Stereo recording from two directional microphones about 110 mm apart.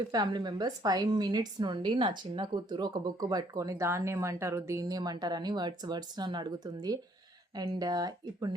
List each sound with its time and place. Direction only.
0.1 s a woman's voice: 40° right (ahead or behind)